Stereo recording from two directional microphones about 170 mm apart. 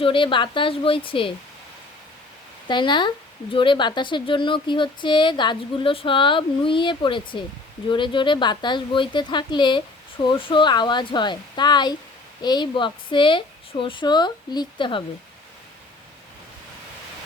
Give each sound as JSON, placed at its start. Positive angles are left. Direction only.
{"t": 0.0, "sound": "a woman's voice", "side_deg": 30}
{"t": 2.6, "sound": "speech", "side_deg": 30}